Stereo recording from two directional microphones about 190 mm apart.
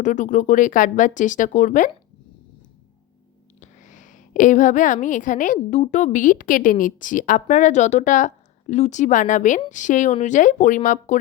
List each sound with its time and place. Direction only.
0.0 s a woman's voice: 40° left (ahead or behind)
3.6 s a woman's voice: 40° left (ahead or behind)